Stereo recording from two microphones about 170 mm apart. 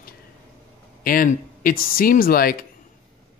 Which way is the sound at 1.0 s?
55° left (ahead or behind).